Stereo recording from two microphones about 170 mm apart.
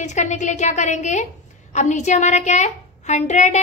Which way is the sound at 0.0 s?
45° left (ahead or behind).